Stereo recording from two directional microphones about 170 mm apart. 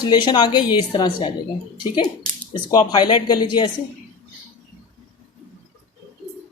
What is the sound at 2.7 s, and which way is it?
Speech, 25° left (ahead or behind).